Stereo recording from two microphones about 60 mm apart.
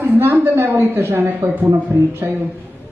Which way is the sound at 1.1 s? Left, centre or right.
Right.